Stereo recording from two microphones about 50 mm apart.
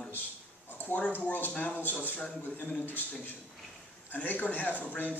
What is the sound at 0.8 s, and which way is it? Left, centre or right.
A man's voice, left.